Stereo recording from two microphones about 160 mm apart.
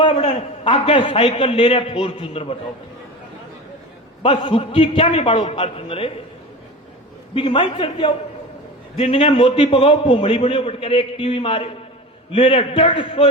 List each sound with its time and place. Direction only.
0.0 s a man's voice: 35° left (ahead or behind)
4.2 s a man's voice: 35° left (ahead or behind)
7.3 s a man's voice: 35° left (ahead or behind)